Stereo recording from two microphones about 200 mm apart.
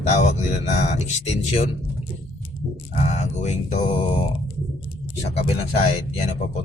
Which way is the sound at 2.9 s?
35° left (ahead or behind).